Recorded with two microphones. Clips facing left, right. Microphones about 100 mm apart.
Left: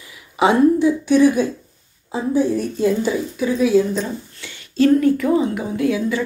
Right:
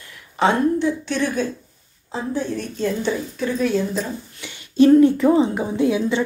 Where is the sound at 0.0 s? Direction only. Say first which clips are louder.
Left 2 dB; 5° left (ahead or behind).